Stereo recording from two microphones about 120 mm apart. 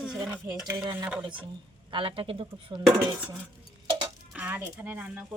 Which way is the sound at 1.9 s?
45° right (ahead or behind).